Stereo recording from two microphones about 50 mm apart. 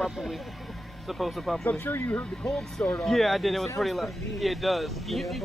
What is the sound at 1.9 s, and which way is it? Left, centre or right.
Speech, left.